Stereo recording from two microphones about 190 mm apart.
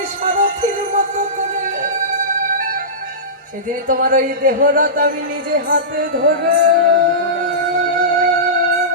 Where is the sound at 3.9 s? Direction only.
45° right (ahead or behind).